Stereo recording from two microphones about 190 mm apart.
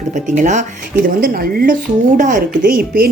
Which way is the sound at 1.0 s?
50° right (ahead or behind).